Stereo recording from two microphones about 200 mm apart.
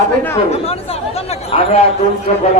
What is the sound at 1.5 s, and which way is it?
Speech, 30° left (ahead or behind).